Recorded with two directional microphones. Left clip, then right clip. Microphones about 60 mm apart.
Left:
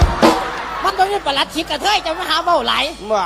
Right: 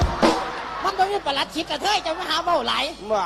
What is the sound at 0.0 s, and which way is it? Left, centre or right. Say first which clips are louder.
Speech: left 6 dB; left.